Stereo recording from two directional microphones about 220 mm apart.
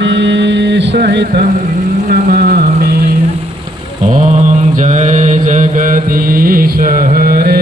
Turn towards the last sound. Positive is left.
turn(degrees=-45)  # may be behind; listen again after turning